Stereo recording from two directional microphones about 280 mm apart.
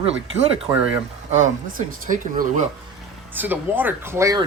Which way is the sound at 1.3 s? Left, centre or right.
Right.